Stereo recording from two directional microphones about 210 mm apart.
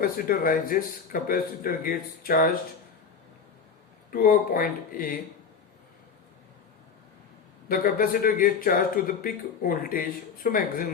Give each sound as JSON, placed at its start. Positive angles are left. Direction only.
{"t": 0.0, "sound": "a man's voice", "side_deg": 40}
{"t": 4.1, "sound": "speech", "side_deg": 45}
{"t": 7.7, "sound": "speech", "side_deg": 45}